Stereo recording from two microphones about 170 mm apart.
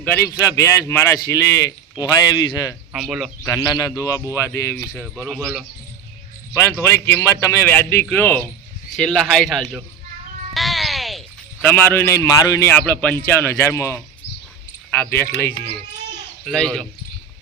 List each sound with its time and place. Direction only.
0.0 s a man's voice: 10° left (ahead or behind)
2.9 s a man's voice: centre (ahead or behind)
3.4 s a man's voice: 20° left (ahead or behind); by 5.6 s centre (ahead or behind)
6.5 s a man's voice: 15° left (ahead or behind)
10.5 s a sound: centre (ahead or behind)
11.6 s a man's voice: 10° left (ahead or behind)
16.5 s a man's voice: centre (ahead or behind)